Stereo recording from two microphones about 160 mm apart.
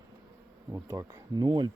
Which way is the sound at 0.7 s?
15° right (ahead or behind).